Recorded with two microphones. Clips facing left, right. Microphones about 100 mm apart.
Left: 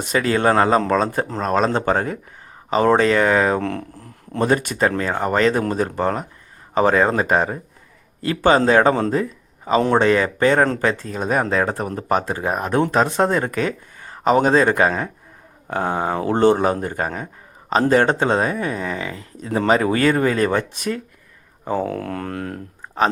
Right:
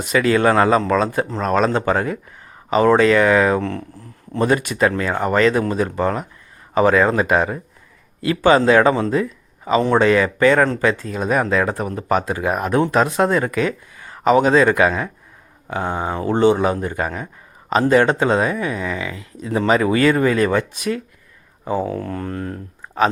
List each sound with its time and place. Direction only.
0.0 s speech: 35° left (ahead or behind)
3.6 s music: 55° left (ahead or behind)
4.4 s speech: 40° left (ahead or behind)
15.7 s speech: 55° left (ahead or behind)
21.6 s speech: centre (ahead or behind)
21.8 s music: 65° left (ahead or behind)